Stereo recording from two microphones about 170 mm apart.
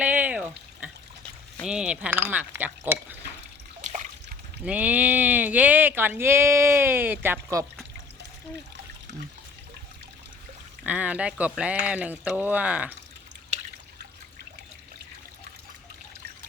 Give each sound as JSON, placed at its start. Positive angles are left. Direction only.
{"t": 0.0, "sound": "a sound", "side_deg": -10}
{"t": 1.6, "sound": "speech", "side_deg": -5}
{"t": 3.8, "sound": "water", "side_deg": -45}
{"t": 4.6, "sound": "speech", "side_deg": -10}
{"t": 10.8, "sound": "speech", "side_deg": -10}